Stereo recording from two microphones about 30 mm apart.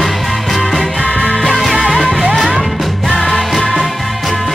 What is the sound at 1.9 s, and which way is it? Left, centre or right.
Music, centre.